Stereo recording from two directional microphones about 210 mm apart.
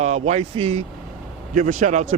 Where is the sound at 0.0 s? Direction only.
30° right (ahead or behind).